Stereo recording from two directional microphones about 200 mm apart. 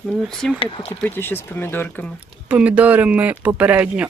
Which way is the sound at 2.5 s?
5° right (ahead or behind).